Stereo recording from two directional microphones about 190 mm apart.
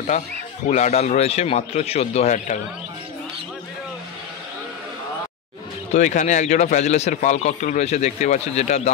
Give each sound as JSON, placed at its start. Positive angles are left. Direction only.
{"t": 0.1, "sound": "speech", "side_deg": 35}
{"t": 5.9, "sound": "speech", "side_deg": 40}